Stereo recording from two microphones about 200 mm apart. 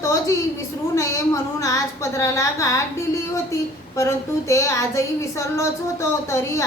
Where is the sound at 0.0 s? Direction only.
15° left (ahead or behind).